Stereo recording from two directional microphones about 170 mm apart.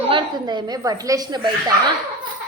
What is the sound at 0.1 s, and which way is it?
A woman's voice, 25° right (ahead or behind).